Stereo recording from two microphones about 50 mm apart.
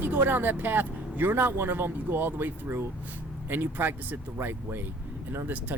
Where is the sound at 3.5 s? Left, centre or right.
Right.